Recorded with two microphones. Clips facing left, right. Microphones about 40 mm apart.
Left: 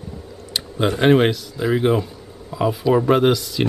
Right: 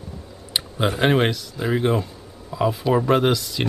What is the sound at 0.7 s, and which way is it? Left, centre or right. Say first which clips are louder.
Speech: left 4 dB; centre.